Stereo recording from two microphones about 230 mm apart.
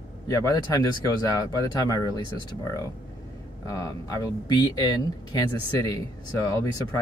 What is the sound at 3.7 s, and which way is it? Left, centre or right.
Speech, centre.